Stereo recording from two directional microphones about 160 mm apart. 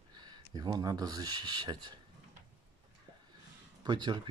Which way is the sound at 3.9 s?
30° right (ahead or behind).